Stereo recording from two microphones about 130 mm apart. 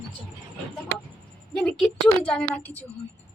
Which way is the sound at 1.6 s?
5° left (ahead or behind).